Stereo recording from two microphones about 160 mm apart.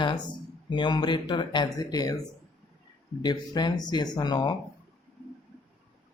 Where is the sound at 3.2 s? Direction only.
25° left (ahead or behind).